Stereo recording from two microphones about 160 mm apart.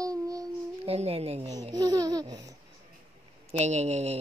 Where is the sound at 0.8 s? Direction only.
40° right (ahead or behind).